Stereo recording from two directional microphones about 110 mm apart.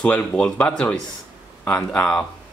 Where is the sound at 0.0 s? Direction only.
10° left (ahead or behind).